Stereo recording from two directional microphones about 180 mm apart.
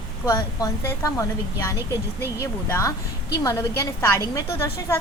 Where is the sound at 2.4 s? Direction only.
15° left (ahead or behind).